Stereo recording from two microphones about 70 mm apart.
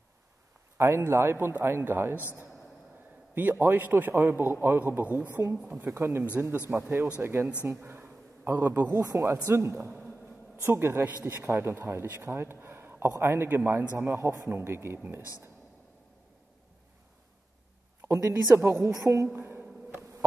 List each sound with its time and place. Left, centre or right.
0.7 s speech: right
3.3 s a man's voice: right
5.9 s speech: right
6.7 s a man's voice: right
8.9 s speech: right
9.5 s a man's voice: right
18.0 s speech: right
20.0 s a sound: right